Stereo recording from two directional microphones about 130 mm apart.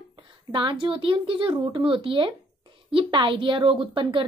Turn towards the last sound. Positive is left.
turn(degrees=-40)  # may be behind; listen again after turning